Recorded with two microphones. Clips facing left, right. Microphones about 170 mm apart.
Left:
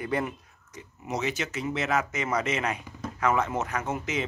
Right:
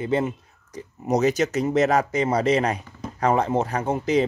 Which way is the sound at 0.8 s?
40° right (ahead or behind).